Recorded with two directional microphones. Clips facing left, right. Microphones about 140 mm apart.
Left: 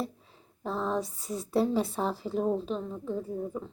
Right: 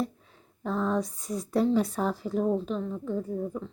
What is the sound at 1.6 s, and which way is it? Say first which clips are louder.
Speech: right 3 dB; 30° left (ahead or behind).